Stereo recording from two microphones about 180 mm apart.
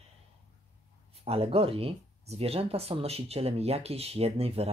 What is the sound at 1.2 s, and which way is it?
Speech, 35° right (ahead or behind).